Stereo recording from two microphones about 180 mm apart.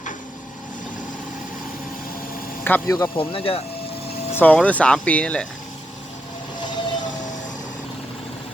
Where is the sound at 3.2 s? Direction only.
30° left (ahead or behind).